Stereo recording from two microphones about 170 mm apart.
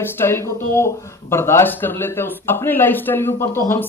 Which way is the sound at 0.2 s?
15° left (ahead or behind).